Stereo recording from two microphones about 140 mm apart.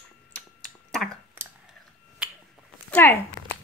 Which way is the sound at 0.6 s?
5° left (ahead or behind).